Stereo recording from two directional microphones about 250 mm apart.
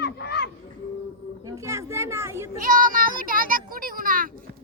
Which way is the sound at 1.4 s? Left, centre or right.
Centre.